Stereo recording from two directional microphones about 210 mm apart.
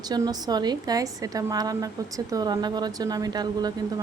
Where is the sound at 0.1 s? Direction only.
20° right (ahead or behind).